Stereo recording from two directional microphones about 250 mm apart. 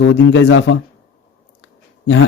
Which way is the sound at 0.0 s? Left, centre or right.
Left.